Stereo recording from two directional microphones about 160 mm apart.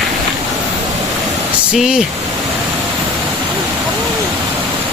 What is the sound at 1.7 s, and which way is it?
Speech, 5° right (ahead or behind).